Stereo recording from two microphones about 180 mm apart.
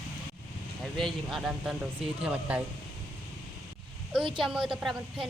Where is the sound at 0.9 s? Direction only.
Centre (ahead or behind).